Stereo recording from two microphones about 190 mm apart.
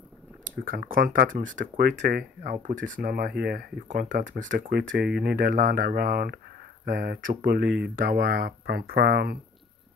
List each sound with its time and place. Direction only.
0.7 s speech: 50° right (ahead or behind)